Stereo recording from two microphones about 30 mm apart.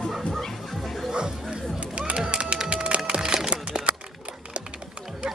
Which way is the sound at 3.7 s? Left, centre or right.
Right.